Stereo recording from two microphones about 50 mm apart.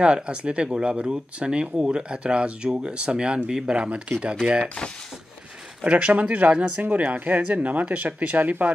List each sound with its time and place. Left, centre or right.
0.0 s speech: right
5.9 s speech: right